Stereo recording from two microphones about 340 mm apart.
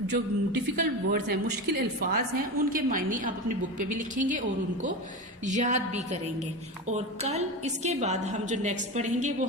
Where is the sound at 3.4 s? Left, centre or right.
Right.